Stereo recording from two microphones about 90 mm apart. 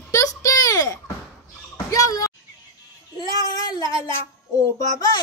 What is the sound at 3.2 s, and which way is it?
Speech, 45° left (ahead or behind).